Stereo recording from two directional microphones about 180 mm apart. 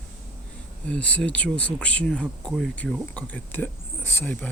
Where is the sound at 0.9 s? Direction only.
5° left (ahead or behind).